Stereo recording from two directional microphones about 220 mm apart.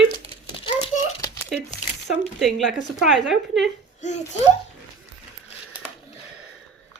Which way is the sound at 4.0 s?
30° left (ahead or behind).